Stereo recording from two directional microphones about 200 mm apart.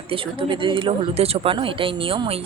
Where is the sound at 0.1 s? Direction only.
25° right (ahead or behind).